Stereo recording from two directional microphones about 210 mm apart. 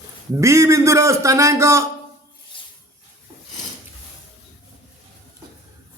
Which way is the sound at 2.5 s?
25° left (ahead or behind).